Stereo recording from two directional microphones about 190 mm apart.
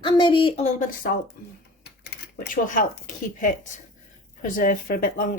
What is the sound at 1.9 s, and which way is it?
Typewriter, 60° left (ahead or behind).